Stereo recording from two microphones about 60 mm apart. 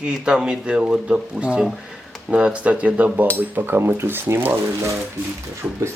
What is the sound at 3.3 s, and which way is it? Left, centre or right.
Speech, right.